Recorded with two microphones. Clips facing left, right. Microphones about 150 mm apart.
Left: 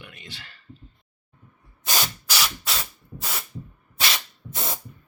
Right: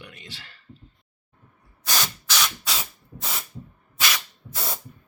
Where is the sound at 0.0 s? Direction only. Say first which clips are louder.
Even; 35° right (ahead or behind).